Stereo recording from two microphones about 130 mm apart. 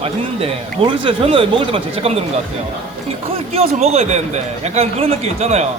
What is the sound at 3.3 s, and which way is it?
A man's voice, 50° right (ahead or behind).